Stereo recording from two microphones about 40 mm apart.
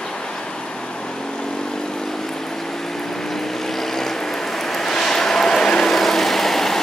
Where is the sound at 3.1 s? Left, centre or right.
Centre.